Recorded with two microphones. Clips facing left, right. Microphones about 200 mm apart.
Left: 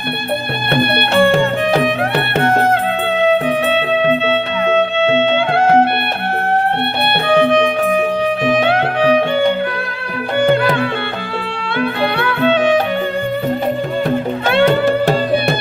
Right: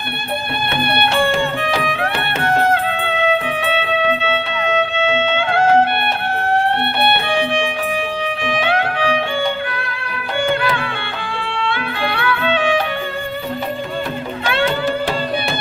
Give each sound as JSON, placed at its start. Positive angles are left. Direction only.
{"t": 0.7, "sound": "music", "side_deg": 60}
{"t": 1.6, "sound": "music", "side_deg": 40}
{"t": 3.7, "sound": "music", "side_deg": 40}
{"t": 7.3, "sound": "music", "side_deg": 40}
{"t": 10.4, "sound": "music", "side_deg": 40}
{"t": 11.8, "sound": "music", "side_deg": 40}